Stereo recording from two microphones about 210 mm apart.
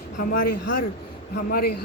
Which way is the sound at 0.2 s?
40° left (ahead or behind).